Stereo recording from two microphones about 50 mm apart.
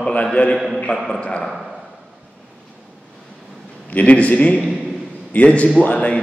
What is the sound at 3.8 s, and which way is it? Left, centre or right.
A man's voice, left.